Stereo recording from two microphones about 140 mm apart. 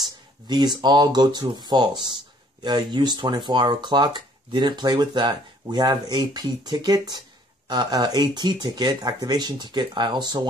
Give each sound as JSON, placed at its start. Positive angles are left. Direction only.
{"t": 0.7, "sound": "speech", "side_deg": -30}